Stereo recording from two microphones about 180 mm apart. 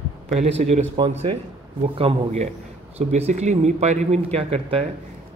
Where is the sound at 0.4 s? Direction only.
35° right (ahead or behind).